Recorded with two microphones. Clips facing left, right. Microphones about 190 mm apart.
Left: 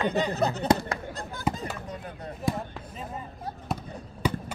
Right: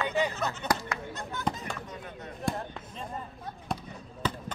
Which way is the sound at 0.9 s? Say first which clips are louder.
Left 2 dB; 35° left (ahead or behind).